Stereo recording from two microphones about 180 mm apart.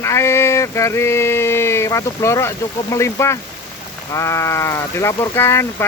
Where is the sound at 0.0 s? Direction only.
15° left (ahead or behind).